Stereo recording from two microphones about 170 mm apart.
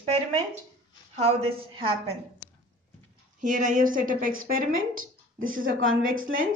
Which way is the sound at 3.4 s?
50° right (ahead or behind).